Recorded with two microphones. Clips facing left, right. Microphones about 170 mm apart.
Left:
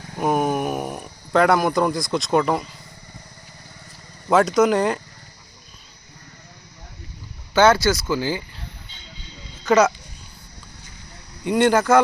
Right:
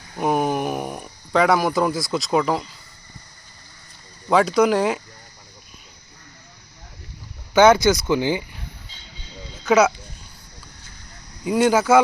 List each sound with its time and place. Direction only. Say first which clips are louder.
0.2 s speech: even; centre (ahead or behind)
4.3 s speech: even; centre (ahead or behind)
7.5 s speech: right 2 dB; 15° right (ahead or behind)
9.6 s speech: even; 5° right (ahead or behind)
11.4 s speech: even; 5° right (ahead or behind)